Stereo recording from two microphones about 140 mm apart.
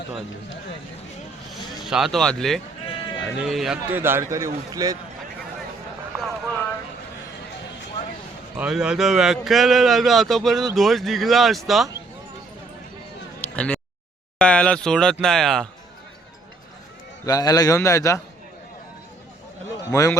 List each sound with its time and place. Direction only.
1.8 s speech: centre (ahead or behind)
2.8 s sheep: 40° left (ahead or behind)
3.4 s speech: 5° right (ahead or behind)
3.9 s speech: 15° right (ahead or behind)
8.5 s speech: 5° right (ahead or behind)
13.4 s a sound: 10° left (ahead or behind)
14.3 s speech: 5° left (ahead or behind)
17.2 s a man's voice: 25° left (ahead or behind)
19.9 s a man's voice: 20° left (ahead or behind)